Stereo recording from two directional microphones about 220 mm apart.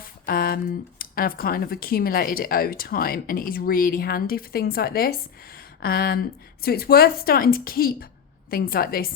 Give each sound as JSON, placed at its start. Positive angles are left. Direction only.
{"t": 0.0, "sound": "a woman's voice", "side_deg": 40}